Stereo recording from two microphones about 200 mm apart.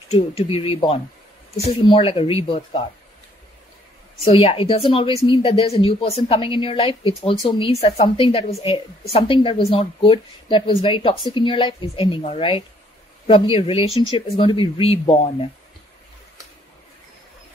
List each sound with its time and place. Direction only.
0.1 s a woman's voice: 30° left (ahead or behind)
4.3 s a woman's voice: 30° left (ahead or behind)